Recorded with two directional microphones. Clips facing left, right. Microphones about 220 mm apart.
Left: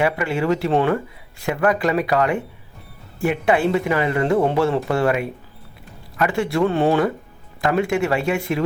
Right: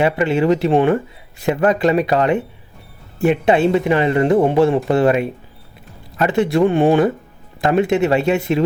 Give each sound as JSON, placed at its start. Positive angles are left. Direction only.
{"t": 0.0, "sound": "speech", "side_deg": -25}